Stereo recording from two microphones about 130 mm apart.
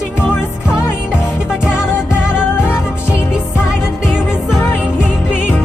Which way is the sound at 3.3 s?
5° right (ahead or behind).